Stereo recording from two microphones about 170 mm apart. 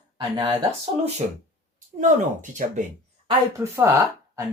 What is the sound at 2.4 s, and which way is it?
Speech, 45° right (ahead or behind).